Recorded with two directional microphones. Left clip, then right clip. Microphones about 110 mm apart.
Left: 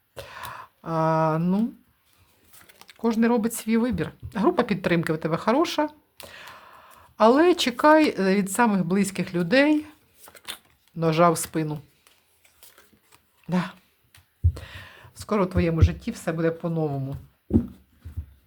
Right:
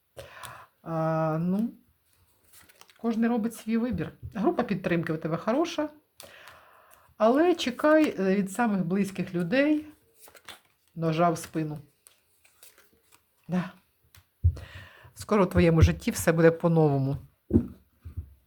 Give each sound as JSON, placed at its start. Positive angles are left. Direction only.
{"t": 0.1, "sound": "gasp", "side_deg": 25}
{"t": 0.5, "sound": "speech", "side_deg": 30}
{"t": 2.8, "sound": "speech", "side_deg": 35}
{"t": 6.2, "sound": "a sound", "side_deg": 30}
{"t": 7.2, "sound": "speech", "side_deg": 30}
{"t": 10.4, "sound": "speech", "side_deg": 40}
{"t": 13.5, "sound": "speech", "side_deg": 30}
{"t": 14.5, "sound": "a sound", "side_deg": 15}
{"t": 15.3, "sound": "speech", "side_deg": -20}
{"t": 15.8, "sound": "speech", "side_deg": -40}